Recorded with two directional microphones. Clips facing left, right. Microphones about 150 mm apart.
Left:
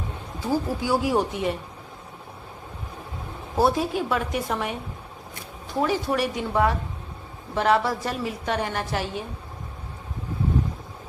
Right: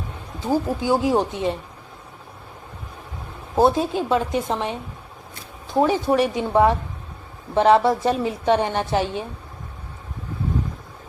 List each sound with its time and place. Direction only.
0.3 s a woman's voice: 20° right (ahead or behind)
3.5 s a woman's voice: 25° right (ahead or behind)
5.8 s a woman's voice: 25° right (ahead or behind)